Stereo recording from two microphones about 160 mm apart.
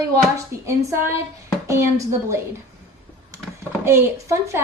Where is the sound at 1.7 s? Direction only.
20° right (ahead or behind).